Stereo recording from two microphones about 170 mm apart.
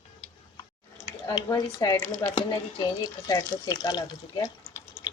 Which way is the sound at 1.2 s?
20° left (ahead or behind).